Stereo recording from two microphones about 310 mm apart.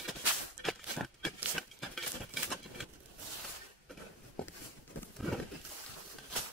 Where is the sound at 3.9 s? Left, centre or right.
Centre.